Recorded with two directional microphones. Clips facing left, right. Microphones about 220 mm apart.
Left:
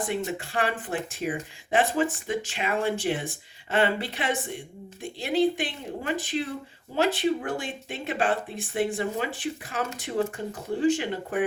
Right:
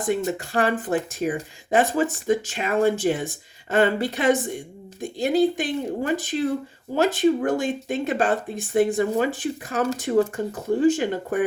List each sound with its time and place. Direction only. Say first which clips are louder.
0.0 s speech: right 5 dB; 40° right (ahead or behind)